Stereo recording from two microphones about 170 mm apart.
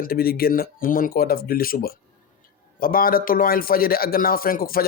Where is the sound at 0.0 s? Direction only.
60° left (ahead or behind).